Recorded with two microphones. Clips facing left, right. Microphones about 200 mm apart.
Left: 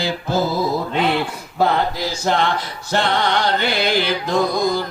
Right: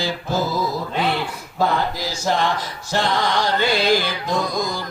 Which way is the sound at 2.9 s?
60° left (ahead or behind).